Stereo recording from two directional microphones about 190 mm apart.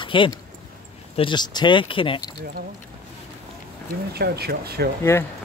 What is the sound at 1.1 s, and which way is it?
Speech, 25° left (ahead or behind).